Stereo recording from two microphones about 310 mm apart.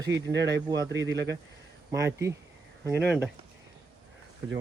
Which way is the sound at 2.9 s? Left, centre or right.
Centre.